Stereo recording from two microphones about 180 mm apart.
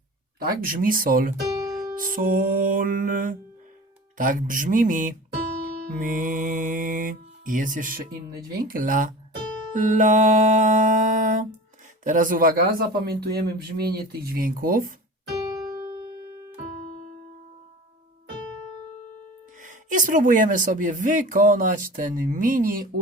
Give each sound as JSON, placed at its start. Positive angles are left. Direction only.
{"t": 0.6, "sound": "speech", "side_deg": -50}
{"t": 15.3, "sound": "keyboard", "side_deg": 0}
{"t": 15.7, "sound": "music", "side_deg": -25}
{"t": 19.6, "sound": "speech", "side_deg": -45}